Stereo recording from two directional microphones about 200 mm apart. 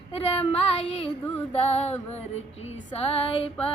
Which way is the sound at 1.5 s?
30° left (ahead or behind).